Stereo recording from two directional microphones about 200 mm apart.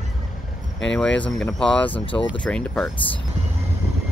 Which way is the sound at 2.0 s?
25° left (ahead or behind).